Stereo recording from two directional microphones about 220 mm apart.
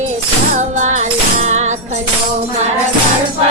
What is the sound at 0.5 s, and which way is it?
Music, 35° right (ahead or behind).